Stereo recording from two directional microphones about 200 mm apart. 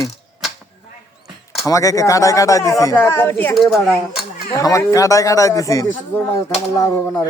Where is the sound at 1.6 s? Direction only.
15° left (ahead or behind); by 3.8 s centre (ahead or behind).